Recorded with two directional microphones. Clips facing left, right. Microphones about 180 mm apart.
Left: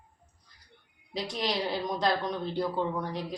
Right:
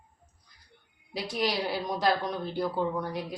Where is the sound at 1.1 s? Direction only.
5° right (ahead or behind).